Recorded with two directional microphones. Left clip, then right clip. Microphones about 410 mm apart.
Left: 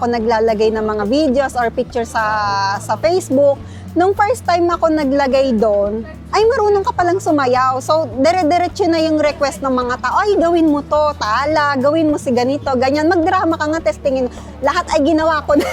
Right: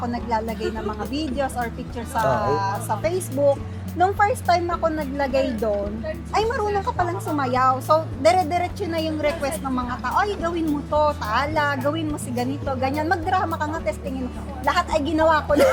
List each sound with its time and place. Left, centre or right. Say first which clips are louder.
0.0 s speech: left 11 dB; left